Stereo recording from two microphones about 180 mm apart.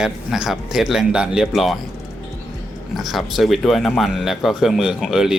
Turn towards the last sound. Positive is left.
turn(degrees=0)  # may be behind; listen again after turning